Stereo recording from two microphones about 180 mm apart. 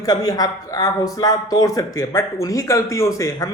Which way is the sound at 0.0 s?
20° left (ahead or behind).